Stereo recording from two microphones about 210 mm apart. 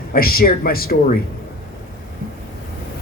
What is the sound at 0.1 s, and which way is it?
Speech, 45° left (ahead or behind).